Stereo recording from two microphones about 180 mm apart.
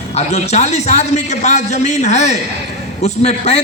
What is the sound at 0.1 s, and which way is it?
A man's voice, 40° left (ahead or behind).